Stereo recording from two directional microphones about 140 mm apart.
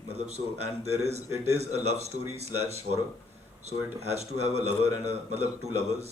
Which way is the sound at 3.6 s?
50° right (ahead or behind).